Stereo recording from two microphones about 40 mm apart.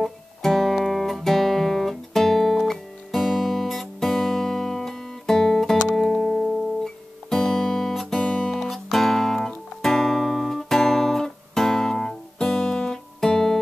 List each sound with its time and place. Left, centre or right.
0.0 s music: centre
7.9 s guitar: centre
8.2 s guitar: centre
8.5 s music: centre
9.8 s guitar: centre